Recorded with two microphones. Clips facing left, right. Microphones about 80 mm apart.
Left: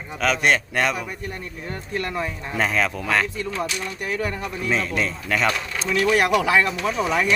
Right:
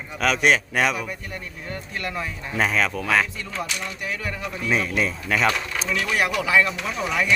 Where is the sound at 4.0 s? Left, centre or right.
Left.